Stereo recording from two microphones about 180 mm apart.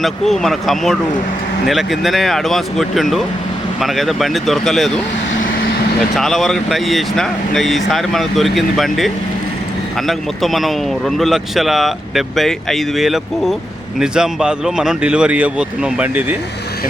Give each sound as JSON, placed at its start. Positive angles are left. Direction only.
{"t": 0.0, "sound": "speech", "side_deg": 0}
{"t": 6.1, "sound": "speech", "side_deg": 0}